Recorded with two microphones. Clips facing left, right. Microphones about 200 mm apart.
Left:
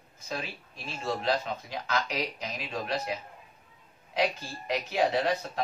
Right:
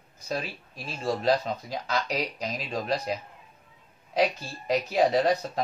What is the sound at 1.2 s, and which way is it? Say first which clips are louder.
Speech: right 6 dB; 40° right (ahead or behind).